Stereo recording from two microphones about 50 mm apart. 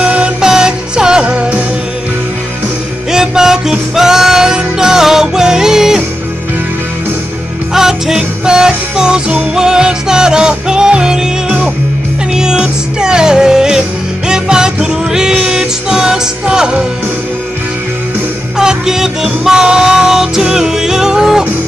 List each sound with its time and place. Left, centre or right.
0.0 s music: right
0.4 s music: centre
3.1 s music: centre
7.7 s music: centre
18.6 s music: centre